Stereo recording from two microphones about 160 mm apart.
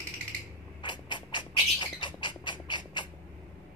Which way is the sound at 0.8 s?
30° left (ahead or behind).